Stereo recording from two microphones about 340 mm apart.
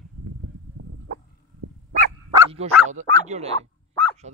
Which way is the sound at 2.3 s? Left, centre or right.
Centre.